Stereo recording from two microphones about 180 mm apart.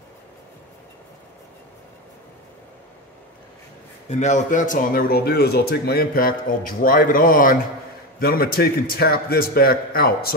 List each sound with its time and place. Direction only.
4.1 s a man's voice: 40° left (ahead or behind); by 10.3 s 55° left (ahead or behind)